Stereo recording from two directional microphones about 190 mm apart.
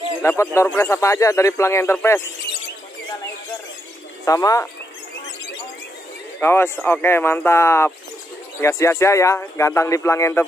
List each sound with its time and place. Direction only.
0.2 s speech: 15° left (ahead or behind)
4.2 s speech: 15° left (ahead or behind)
6.4 s speech: 10° left (ahead or behind)